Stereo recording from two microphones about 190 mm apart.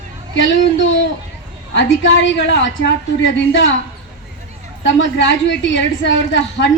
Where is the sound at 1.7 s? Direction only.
75° left (ahead or behind).